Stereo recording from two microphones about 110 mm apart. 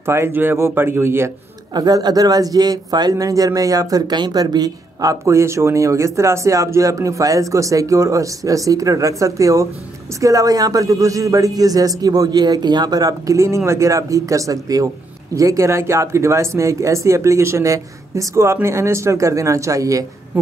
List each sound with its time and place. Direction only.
0.0 s speech: 20° right (ahead or behind)
1.7 s a man's voice: 35° right (ahead or behind)